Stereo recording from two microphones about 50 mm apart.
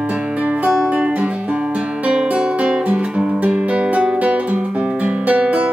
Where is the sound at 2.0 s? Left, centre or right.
Centre.